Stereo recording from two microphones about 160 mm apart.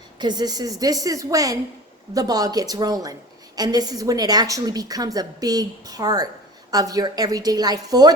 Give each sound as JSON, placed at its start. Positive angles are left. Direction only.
{"t": 0.2, "sound": "a woman's voice", "side_deg": -25}